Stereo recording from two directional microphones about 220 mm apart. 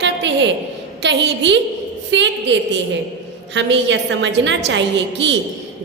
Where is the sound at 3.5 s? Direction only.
55° right (ahead or behind).